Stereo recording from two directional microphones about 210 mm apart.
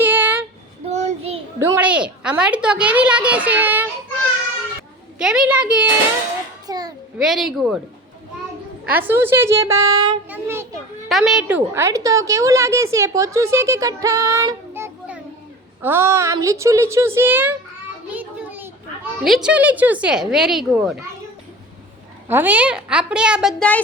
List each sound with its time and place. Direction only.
0.0 s child singing: 10° right (ahead or behind)
0.9 s child singing: 30° right (ahead or behind)
1.5 s a woman's voice: 10° right (ahead or behind)
5.1 s a woman's voice: 5° right (ahead or behind)
6.7 s a woman's voice: 20° right (ahead or behind)
7.2 s a woman's voice: centre (ahead or behind)
8.9 s a woman's voice: 10° right (ahead or behind)
18.1 s children playing: 10° right (ahead or behind)
19.2 s a woman's voice: centre (ahead or behind)
22.3 s a woman's voice: 10° right (ahead or behind)